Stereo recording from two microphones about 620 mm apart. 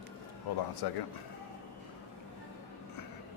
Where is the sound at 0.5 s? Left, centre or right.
Left.